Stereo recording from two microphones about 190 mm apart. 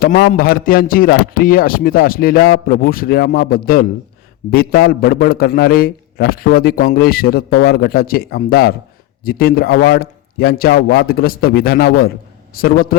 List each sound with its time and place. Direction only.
0.0 s a man's voice: 55° left (ahead or behind)